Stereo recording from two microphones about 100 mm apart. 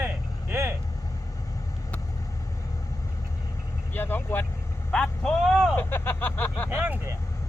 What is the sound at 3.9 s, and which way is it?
Vehicle, 20° left (ahead or behind).